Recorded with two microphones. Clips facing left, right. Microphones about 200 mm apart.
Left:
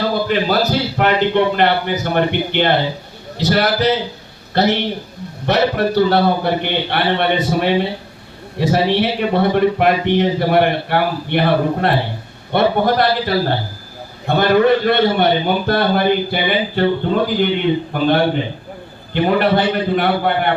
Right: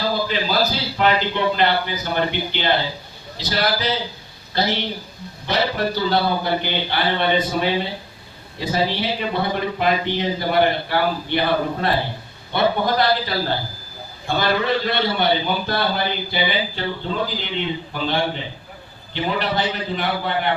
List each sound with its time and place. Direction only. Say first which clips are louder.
0.0 s a man's voice: left 5 dB; 60° left (ahead or behind)